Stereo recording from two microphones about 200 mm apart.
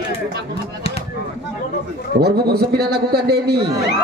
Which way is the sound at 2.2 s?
50° right (ahead or behind).